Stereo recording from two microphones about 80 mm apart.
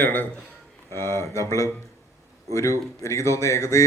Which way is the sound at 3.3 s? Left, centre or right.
Left.